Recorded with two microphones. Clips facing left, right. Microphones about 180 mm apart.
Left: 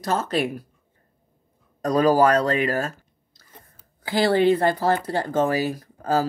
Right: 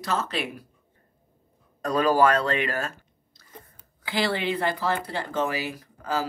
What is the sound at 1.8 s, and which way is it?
Speech, 40° left (ahead or behind).